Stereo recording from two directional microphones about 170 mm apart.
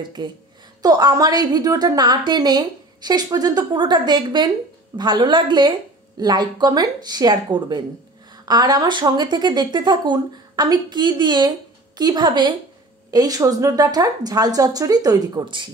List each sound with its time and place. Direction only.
0.0 s a woman's voice: 25° right (ahead or behind)